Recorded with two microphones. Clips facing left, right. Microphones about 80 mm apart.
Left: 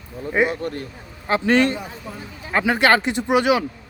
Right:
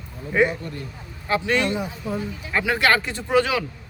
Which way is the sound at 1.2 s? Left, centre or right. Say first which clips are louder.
Left 4 dB; left.